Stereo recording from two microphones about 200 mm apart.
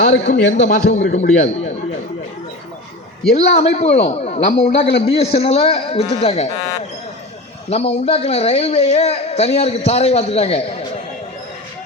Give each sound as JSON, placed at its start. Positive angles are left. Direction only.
{"t": 0.0, "sound": "a man's voice", "side_deg": 60}
{"t": 1.1, "sound": "a man's voice", "side_deg": 35}
{"t": 3.3, "sound": "a man's voice", "side_deg": 30}
{"t": 4.9, "sound": "a man's voice", "side_deg": 60}
{"t": 5.1, "sound": "a man's voice", "side_deg": 30}
{"t": 7.7, "sound": "a man's voice", "side_deg": 30}